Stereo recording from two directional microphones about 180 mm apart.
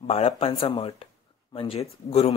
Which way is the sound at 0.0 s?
30° left (ahead or behind).